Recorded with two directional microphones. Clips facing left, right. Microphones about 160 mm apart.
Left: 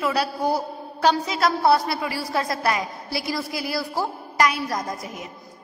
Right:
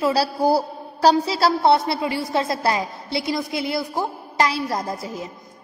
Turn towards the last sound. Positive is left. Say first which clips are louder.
# right 3 dB
turn(degrees=-30)  # may be behind; listen again after turning